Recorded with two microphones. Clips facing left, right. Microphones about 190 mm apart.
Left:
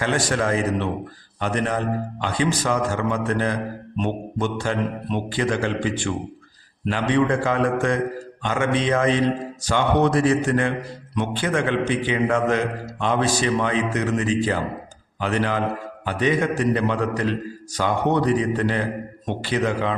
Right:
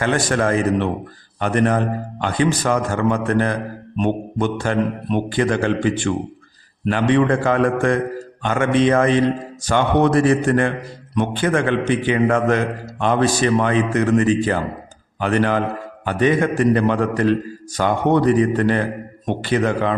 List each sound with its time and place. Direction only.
0.0 s a man's voice: 55° right (ahead or behind)